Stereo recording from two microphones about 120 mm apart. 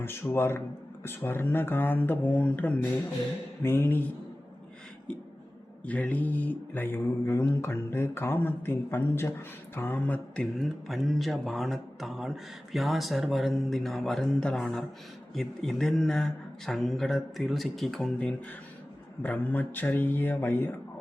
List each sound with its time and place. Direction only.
0.0 s speech: 20° left (ahead or behind)
5.8 s speech: 10° left (ahead or behind)